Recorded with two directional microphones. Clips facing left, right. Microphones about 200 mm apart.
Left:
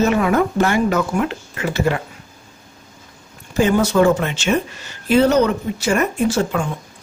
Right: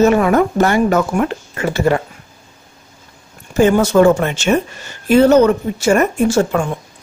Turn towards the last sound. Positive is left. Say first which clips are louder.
# right 4 dB
turn(degrees=-45)  # may be behind; listen again after turning